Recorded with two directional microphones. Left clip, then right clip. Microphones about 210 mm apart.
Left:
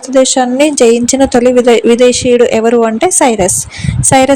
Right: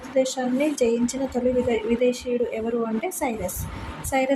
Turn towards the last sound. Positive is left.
turn(degrees=45)  # may be behind; listen again after turning